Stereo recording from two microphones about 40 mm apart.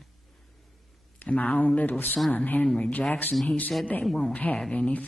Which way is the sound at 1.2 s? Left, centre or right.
Left.